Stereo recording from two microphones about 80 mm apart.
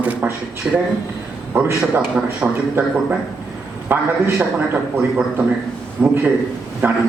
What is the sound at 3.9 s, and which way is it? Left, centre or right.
Speech, right.